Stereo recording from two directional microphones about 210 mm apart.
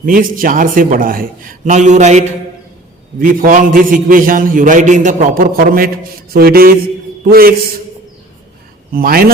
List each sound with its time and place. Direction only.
0.0 s a man's voice: 40° right (ahead or behind)
8.9 s a man's voice: 45° right (ahead or behind)